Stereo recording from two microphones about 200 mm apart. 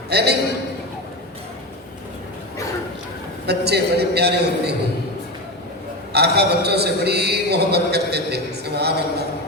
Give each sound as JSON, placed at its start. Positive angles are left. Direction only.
{"t": 0.1, "sound": "a man's voice", "side_deg": -55}
{"t": 3.4, "sound": "a man's voice", "side_deg": -55}
{"t": 6.1, "sound": "a man's voice", "side_deg": -55}